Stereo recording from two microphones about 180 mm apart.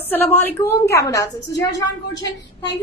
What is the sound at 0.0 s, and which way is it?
A woman's voice, 10° left (ahead or behind).